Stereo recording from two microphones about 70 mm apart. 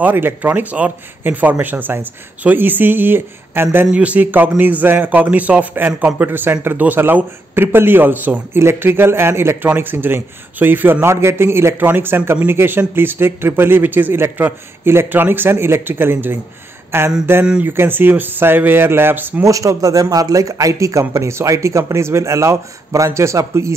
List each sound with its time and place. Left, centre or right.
0.0 s a man's voice: right
3.9 s a man's voice: centre
19.4 s speech: right